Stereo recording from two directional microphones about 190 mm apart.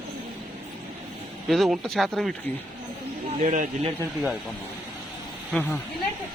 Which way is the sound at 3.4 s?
45° right (ahead or behind).